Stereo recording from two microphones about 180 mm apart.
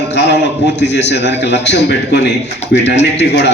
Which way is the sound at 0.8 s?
75° left (ahead or behind).